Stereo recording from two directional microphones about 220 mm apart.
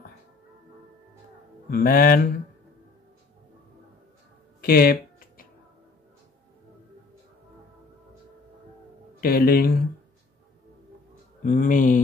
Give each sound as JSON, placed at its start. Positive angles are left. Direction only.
{"t": 1.7, "sound": "speech", "side_deg": 40}
{"t": 4.6, "sound": "speech", "side_deg": 40}
{"t": 9.2, "sound": "speech", "side_deg": 45}
{"t": 11.4, "sound": "speech", "side_deg": 40}